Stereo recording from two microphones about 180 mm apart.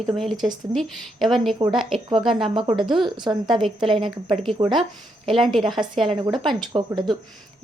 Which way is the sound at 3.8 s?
30° right (ahead or behind).